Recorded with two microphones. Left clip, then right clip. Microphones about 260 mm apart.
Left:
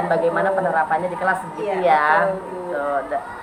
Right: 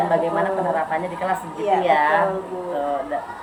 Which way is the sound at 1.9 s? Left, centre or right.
Centre.